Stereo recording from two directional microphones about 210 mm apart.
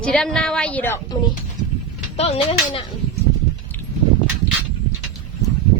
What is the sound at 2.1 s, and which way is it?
Speech, 30° left (ahead or behind).